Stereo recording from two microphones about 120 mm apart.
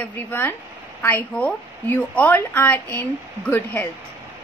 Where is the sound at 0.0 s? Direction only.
15° left (ahead or behind).